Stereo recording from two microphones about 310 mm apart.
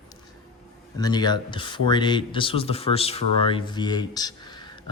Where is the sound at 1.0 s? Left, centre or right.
Centre.